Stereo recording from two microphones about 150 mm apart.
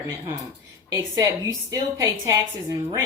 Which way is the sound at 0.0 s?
15° right (ahead or behind).